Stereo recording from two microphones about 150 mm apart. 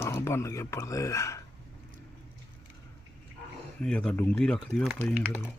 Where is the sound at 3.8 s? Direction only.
5° left (ahead or behind).